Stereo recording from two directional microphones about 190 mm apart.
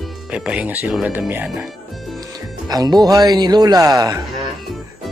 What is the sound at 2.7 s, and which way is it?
Speech, 20° right (ahead or behind).